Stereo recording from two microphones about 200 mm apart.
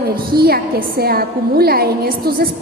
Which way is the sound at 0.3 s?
50° right (ahead or behind).